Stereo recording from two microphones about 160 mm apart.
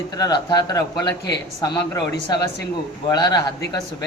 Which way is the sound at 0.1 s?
25° left (ahead or behind).